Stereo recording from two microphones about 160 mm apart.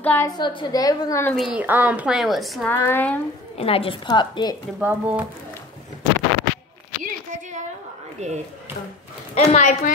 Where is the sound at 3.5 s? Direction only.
35° left (ahead or behind).